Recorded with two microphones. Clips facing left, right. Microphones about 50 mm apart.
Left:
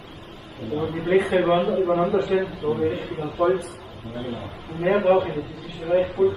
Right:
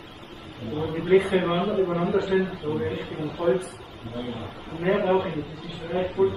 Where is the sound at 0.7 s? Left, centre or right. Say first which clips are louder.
Even; centre.